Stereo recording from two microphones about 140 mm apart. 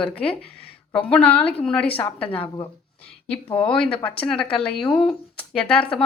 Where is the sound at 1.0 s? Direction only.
10° left (ahead or behind).